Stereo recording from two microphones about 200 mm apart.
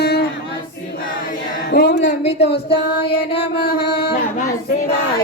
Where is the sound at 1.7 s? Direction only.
55° left (ahead or behind).